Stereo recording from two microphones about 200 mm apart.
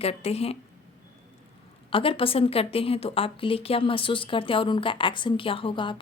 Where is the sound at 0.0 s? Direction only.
30° left (ahead or behind).